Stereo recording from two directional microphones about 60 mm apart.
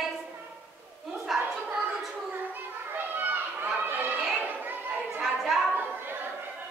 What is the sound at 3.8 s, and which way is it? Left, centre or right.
Children playing, right.